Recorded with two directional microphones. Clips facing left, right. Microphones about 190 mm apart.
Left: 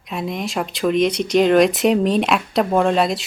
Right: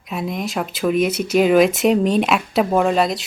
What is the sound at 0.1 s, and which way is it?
Speech, centre (ahead or behind).